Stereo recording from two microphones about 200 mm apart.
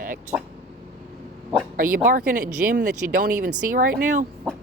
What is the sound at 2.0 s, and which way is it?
Speech, 40° right (ahead or behind).